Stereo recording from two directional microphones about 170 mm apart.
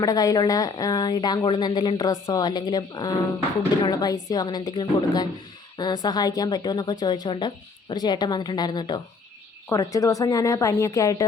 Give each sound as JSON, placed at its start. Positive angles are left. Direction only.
{"t": 0.0, "sound": "a woman's voice", "side_deg": 20}